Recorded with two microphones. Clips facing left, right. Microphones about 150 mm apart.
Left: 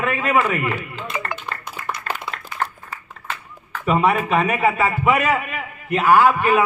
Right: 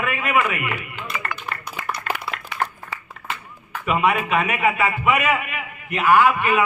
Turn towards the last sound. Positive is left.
turn(degrees=35)  # may be behind; listen again after turning